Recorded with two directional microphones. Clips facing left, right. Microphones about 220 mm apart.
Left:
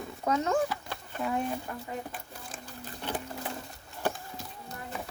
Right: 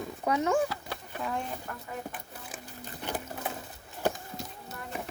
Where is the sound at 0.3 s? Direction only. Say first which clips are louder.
Right 1 dB; 15° right (ahead or behind).